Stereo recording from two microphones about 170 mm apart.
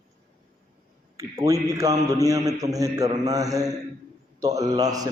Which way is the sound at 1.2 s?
20° right (ahead or behind).